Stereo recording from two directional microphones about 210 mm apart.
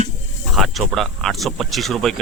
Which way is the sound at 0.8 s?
Centre (ahead or behind).